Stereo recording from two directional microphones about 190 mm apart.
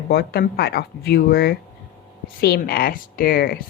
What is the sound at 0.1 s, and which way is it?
Speech, 55° left (ahead or behind).